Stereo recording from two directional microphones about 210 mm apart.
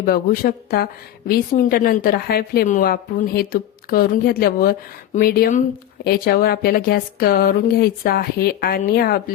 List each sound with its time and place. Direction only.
0.0 s a woman's voice: 45° left (ahead or behind)